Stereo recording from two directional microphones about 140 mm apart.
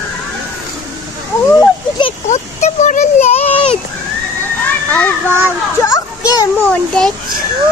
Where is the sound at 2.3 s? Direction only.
55° left (ahead or behind).